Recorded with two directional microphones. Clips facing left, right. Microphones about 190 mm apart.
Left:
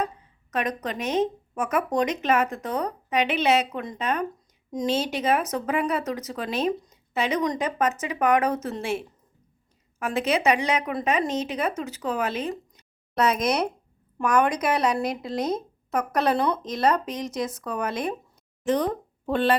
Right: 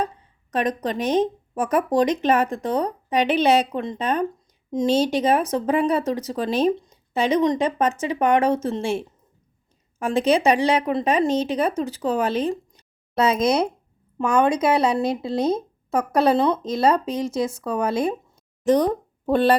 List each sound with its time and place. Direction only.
0.0 s speech: 30° right (ahead or behind)